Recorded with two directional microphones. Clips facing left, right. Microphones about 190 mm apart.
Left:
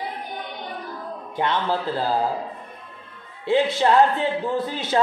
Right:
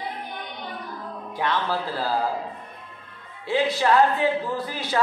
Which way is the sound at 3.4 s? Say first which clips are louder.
Left 3 dB; 25° left (ahead or behind).